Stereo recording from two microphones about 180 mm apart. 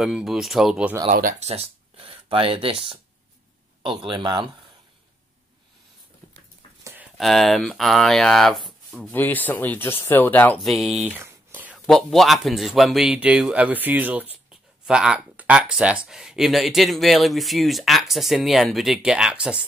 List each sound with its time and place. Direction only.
0.0 s speech: centre (ahead or behind)
1.1 s speech: 50° right (ahead or behind)
1.5 s speech: 35° right (ahead or behind)
4.0 s speech: 25° right (ahead or behind)
6.8 s a sound: 10° right (ahead or behind)
7.2 s speech: centre (ahead or behind)
11.1 s whispering: 10° right (ahead or behind)
11.8 s speech: centre (ahead or behind)